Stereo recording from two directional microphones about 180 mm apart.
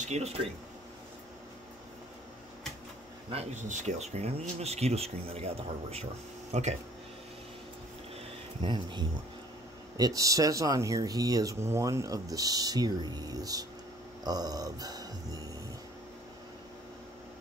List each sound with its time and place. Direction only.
0.0 s speech: 35° right (ahead or behind)
3.3 s speech: 35° right (ahead or behind)
8.6 s speech: 25° right (ahead or behind)